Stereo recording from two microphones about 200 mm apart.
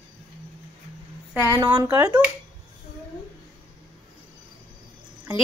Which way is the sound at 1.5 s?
15° right (ahead or behind).